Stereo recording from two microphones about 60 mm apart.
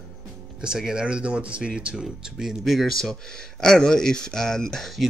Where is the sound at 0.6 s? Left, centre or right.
Centre.